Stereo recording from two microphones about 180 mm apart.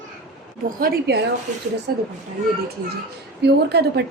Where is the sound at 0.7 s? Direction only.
55° right (ahead or behind).